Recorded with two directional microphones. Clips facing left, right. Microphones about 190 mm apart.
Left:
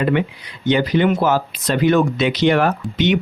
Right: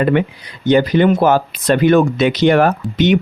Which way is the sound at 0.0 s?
50° right (ahead or behind).